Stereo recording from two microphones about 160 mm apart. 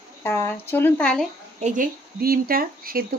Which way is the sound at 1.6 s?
55° right (ahead or behind).